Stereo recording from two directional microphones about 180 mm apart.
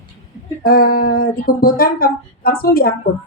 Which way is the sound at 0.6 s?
55° left (ahead or behind).